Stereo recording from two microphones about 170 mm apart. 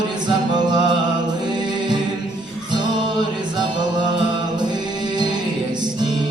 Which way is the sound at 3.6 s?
25° right (ahead or behind).